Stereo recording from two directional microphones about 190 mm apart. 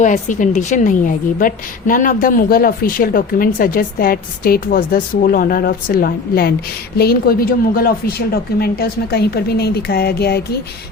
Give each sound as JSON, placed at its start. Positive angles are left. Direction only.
{"t": 0.0, "sound": "a woman's voice", "side_deg": 40}